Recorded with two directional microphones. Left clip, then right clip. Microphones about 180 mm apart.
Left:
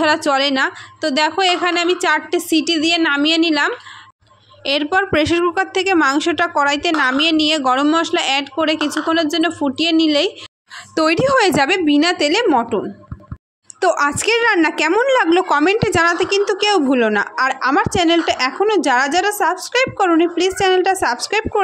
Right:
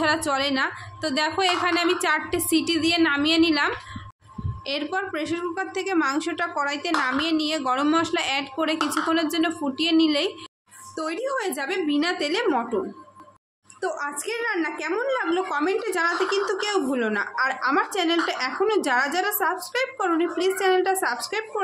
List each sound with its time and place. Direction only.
0.0 s a woman's voice: 35° left (ahead or behind)
11.0 s a woman's voice: 50° left (ahead or behind)
13.7 s a woman's voice: 55° left (ahead or behind)